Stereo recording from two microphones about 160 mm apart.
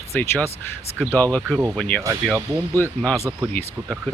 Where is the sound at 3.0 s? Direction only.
15° left (ahead or behind).